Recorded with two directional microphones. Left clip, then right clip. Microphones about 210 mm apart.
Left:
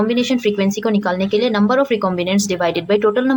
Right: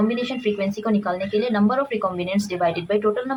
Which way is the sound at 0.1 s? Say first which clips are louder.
Left 6 dB; 45° left (ahead or behind).